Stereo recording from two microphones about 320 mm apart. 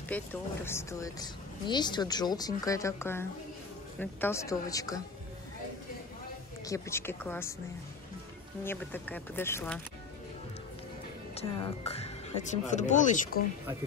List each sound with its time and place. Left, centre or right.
0.1 s speech: centre
6.6 s speech: centre
8.6 s speech: centre
11.3 s speech: centre